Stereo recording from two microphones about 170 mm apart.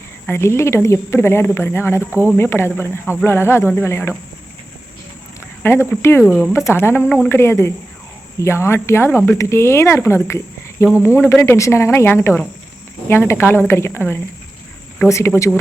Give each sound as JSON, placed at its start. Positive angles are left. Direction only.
{"t": 0.3, "sound": "speech", "side_deg": 15}
{"t": 2.0, "sound": "speech", "side_deg": -10}
{"t": 2.4, "sound": "speech", "side_deg": 15}
{"t": 5.9, "sound": "speech", "side_deg": 15}